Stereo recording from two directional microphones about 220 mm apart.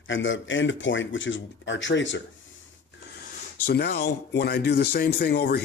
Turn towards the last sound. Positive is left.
turn(degrees=45)  # may be behind; listen again after turning